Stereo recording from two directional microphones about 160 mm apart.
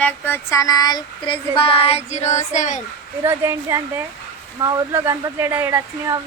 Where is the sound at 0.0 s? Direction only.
10° left (ahead or behind); by 2.8 s 50° left (ahead or behind).